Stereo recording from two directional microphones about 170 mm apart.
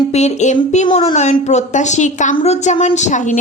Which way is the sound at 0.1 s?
40° left (ahead or behind).